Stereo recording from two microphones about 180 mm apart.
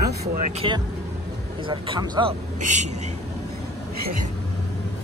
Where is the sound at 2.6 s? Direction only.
40° right (ahead or behind).